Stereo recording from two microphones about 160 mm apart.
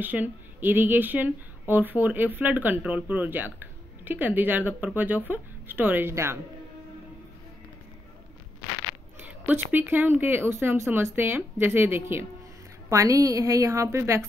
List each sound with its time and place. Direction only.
0.0 s speech: 10° right (ahead or behind)
9.2 s a woman's voice: 10° right (ahead or behind)